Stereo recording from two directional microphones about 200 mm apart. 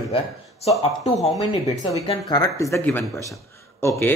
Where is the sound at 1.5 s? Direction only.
20° left (ahead or behind).